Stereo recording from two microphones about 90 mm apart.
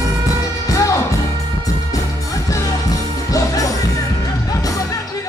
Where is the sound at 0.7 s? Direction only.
35° left (ahead or behind).